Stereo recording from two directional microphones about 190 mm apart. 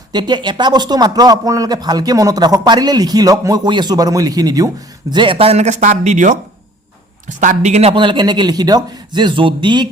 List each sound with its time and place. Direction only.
0.1 s speech: 25° right (ahead or behind)